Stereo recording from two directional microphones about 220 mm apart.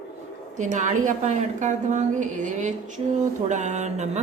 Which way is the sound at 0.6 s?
35° right (ahead or behind).